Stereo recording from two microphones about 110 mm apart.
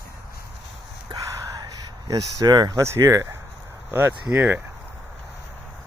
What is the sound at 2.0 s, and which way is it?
Speech, 35° right (ahead or behind).